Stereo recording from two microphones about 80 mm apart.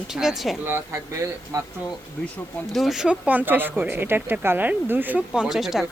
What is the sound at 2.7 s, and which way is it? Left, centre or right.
Speech, centre.